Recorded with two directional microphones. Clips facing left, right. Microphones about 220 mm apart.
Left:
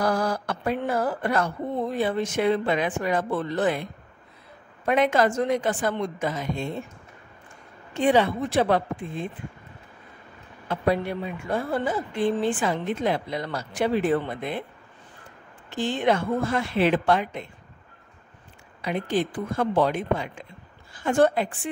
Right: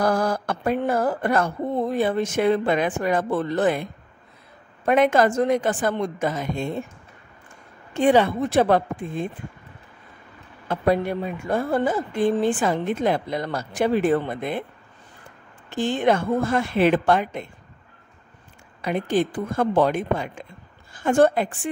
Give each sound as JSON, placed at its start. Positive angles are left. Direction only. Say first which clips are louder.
{"t": 0.0, "sound": "speech", "louder": "right 3 dB", "side_deg": -50}
{"t": 4.8, "sound": "speech", "louder": "right 3 dB", "side_deg": -50}
{"t": 8.0, "sound": "speech", "louder": "right 3 dB", "side_deg": -50}
{"t": 10.7, "sound": "speech", "louder": "right 3 dB", "side_deg": -45}
{"t": 15.7, "sound": "speech", "louder": "right 3 dB", "side_deg": -45}
{"t": 18.8, "sound": "a woman's voice", "louder": "right 3 dB", "side_deg": -50}